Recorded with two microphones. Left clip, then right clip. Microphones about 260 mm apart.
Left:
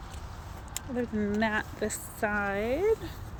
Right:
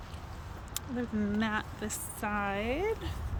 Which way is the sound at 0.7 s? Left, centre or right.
Centre.